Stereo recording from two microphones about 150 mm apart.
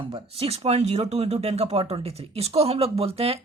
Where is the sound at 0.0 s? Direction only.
40° right (ahead or behind).